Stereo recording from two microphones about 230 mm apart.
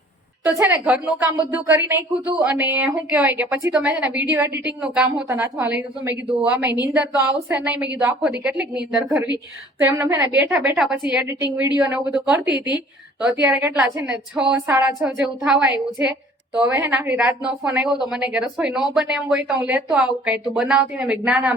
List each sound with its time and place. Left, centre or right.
0.4 s a woman's voice: centre
6.7 s a woman's voice: centre
7.5 s a woman's voice: centre